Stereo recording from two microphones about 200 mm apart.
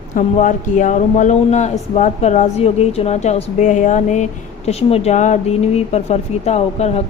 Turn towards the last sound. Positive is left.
turn(degrees=30)  # may be behind; listen again after turning